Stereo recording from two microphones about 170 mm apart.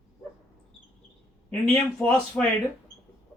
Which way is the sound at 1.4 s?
10° left (ahead or behind).